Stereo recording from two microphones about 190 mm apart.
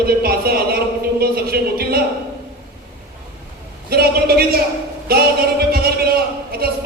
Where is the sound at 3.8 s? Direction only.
55° right (ahead or behind).